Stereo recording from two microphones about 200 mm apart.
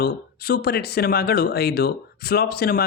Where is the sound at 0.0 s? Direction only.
55° left (ahead or behind).